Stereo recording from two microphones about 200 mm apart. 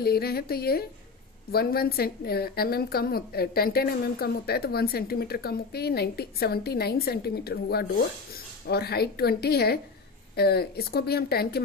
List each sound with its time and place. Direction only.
0.0 s a woman's voice: 50° left (ahead or behind)